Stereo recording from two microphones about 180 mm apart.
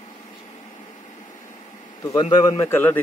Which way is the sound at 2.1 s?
25° left (ahead or behind).